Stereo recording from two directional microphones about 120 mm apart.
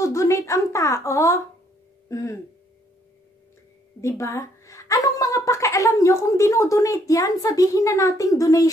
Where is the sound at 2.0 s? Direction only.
25° left (ahead or behind).